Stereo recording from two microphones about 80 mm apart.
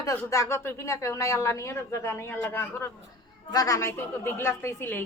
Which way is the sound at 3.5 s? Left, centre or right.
Left.